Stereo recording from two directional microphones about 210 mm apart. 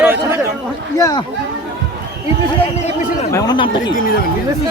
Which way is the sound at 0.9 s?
15° left (ahead or behind).